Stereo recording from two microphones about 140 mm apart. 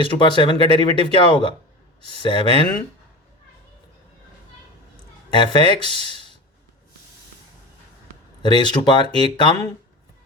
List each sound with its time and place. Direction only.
0.3 s speech: 35° left (ahead or behind)
5.3 s speech: 35° left (ahead or behind)
8.4 s speech: 30° left (ahead or behind)